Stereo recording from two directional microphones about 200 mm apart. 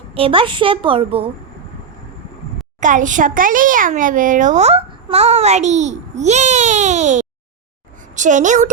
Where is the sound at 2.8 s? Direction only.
40° right (ahead or behind).